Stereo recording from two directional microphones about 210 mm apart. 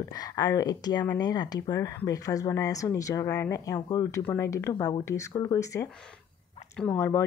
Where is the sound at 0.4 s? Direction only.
20° left (ahead or behind).